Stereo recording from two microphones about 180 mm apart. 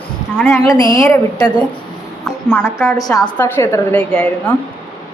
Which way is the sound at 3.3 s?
10° left (ahead or behind).